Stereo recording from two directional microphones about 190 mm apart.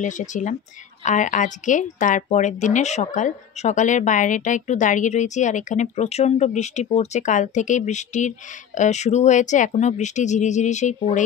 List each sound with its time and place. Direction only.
0.0 s a woman's voice: 40° left (ahead or behind)